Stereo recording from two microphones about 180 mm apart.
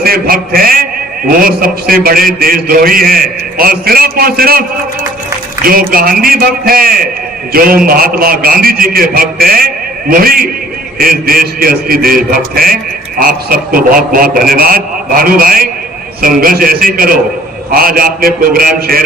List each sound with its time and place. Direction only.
0.0 s a man's voice: 55° right (ahead or behind)
5.6 s a man's voice: 55° right (ahead or behind)